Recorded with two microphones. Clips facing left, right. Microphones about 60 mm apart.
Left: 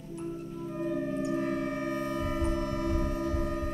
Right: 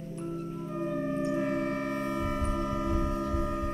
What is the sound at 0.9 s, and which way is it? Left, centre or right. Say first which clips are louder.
Organ: right 1 dB; centre.